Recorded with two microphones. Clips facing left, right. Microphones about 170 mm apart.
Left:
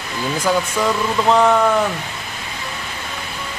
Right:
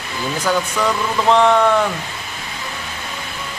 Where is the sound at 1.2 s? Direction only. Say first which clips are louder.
Right 1 dB; 5° left (ahead or behind).